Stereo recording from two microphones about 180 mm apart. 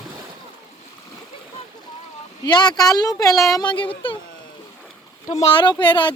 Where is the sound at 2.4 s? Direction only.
25° left (ahead or behind).